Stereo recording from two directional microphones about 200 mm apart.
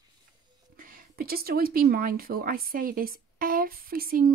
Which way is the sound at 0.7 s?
45° right (ahead or behind).